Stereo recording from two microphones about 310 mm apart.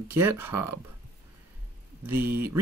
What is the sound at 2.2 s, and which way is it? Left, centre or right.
Speech, right.